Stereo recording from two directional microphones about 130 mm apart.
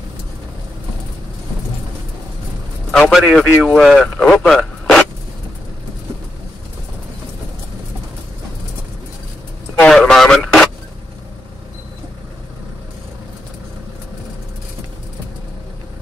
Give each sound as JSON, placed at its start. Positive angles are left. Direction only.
{"t": 2.9, "sound": "a man's voice", "side_deg": 0}
{"t": 9.8, "sound": "vehicle", "side_deg": 5}